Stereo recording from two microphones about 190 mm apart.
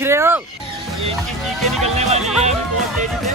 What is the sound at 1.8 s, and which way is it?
Speech, 35° right (ahead or behind).